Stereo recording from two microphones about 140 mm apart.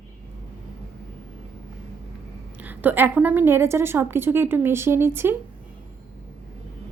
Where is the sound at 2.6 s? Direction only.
10° right (ahead or behind).